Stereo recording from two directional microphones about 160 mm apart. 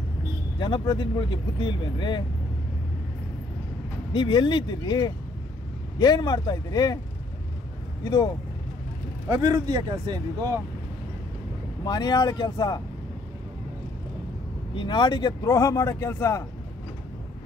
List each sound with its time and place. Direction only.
0.6 s speech: 30° left (ahead or behind)
4.1 s speech: 30° left (ahead or behind)
8.0 s speech: 25° left (ahead or behind)
9.3 s speech: 25° right (ahead or behind)
11.8 s speech: 25° left (ahead or behind)
14.8 s speech: 30° left (ahead or behind)